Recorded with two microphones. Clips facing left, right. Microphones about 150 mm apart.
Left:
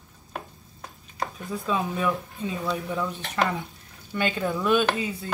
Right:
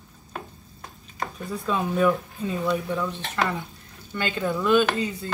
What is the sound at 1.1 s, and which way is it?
Speech, centre (ahead or behind).